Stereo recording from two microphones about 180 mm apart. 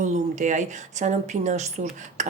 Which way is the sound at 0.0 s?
45° right (ahead or behind).